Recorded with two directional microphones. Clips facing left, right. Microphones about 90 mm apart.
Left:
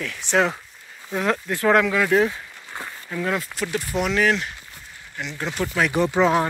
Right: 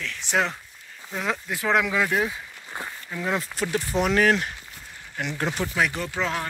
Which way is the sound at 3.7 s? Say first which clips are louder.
Right 1 dB; 35° right (ahead or behind).